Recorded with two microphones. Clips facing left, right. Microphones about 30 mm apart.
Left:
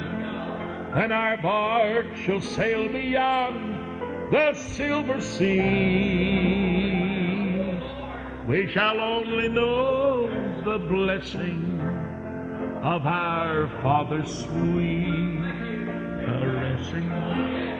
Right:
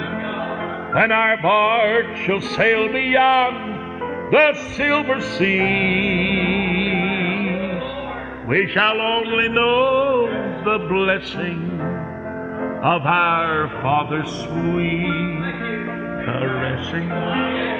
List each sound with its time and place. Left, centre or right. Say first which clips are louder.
1.1 s mantra: right 6 dB; right
2.0 s music: right 6 dB; right
8.7 s mantra: right 5 dB; right
9.4 s music: right 7 dB; right
10.7 s mantra: right 6 dB; right
12.9 s mantra: right 9 dB; right
14.5 s music: right 4 dB; right